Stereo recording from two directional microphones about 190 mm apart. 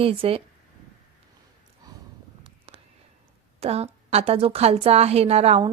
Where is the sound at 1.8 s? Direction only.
20° right (ahead or behind).